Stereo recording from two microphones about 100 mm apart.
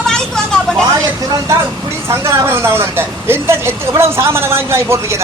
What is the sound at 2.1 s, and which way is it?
Speech, 25° right (ahead or behind).